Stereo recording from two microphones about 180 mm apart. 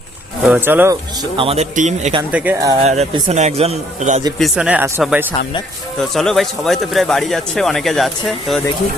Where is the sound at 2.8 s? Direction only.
40° right (ahead or behind).